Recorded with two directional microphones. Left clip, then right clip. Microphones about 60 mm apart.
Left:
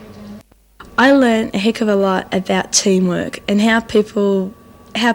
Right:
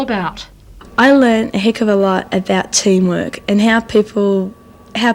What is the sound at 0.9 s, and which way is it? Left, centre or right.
A woman's voice, left.